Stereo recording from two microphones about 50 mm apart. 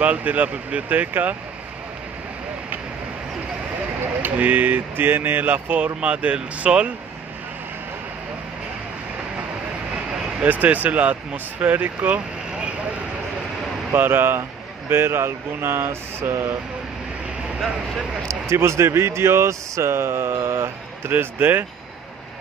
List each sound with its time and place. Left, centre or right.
0.0 s speech: right
4.2 s speech: right
5.9 s speech: right
10.4 s speech: right
13.9 s speech: right
18.3 s speech: right
21.1 s speech: right